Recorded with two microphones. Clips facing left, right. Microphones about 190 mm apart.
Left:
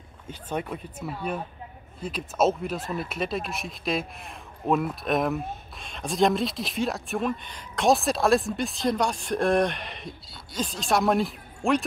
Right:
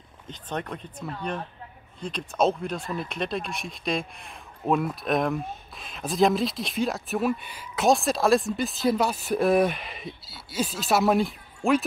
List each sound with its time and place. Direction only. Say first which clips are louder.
0.3 s speech: left 2 dB; 10° left (ahead or behind)